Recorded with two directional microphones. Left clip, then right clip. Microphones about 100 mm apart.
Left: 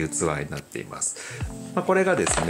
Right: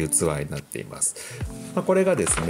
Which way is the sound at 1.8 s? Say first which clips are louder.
Even; 55° right (ahead or behind).